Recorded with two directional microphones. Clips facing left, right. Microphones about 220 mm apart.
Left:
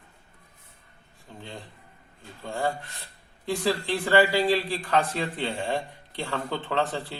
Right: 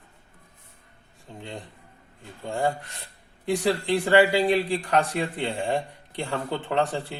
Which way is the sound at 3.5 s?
15° right (ahead or behind).